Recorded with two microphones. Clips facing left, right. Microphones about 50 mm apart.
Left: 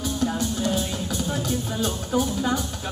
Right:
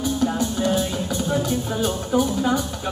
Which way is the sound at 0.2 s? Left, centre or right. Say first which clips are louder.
Right 1 dB; centre.